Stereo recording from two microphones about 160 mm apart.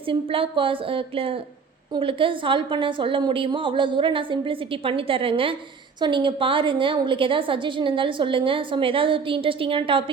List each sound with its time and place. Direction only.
0.1 s a woman's voice: 35° right (ahead or behind)